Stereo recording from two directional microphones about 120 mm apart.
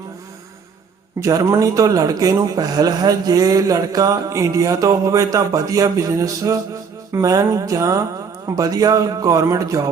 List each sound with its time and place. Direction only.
1.2 s a man's voice: 30° right (ahead or behind)